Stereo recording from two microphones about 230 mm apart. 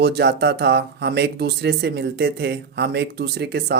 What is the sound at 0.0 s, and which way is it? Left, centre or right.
Speech, right.